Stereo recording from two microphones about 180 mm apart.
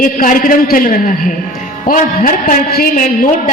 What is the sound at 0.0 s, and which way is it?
A woman's voice, 50° left (ahead or behind).